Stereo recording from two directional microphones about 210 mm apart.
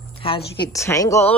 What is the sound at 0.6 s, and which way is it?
Speech, 15° left (ahead or behind).